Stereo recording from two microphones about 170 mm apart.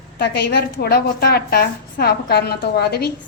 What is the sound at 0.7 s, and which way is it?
A woman's voice, 65° left (ahead or behind).